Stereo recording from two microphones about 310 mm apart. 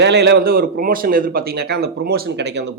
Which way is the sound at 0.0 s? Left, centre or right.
Right.